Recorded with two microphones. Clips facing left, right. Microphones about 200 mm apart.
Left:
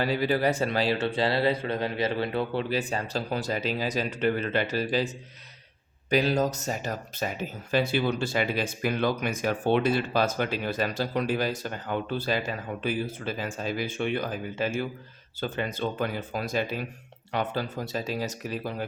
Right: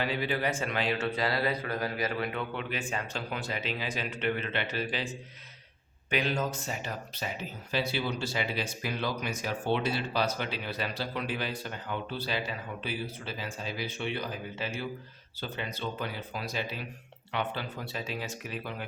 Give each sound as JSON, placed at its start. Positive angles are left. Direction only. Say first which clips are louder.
{"t": 0.0, "sound": "a man's voice", "louder": "left 6 dB", "side_deg": 40}